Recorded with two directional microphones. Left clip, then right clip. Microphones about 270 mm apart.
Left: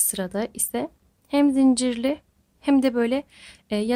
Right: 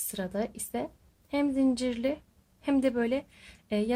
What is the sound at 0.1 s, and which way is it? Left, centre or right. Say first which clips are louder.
Speech: left 5 dB; left.